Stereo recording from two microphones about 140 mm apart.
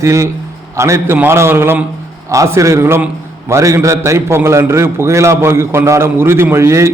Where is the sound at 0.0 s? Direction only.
20° right (ahead or behind).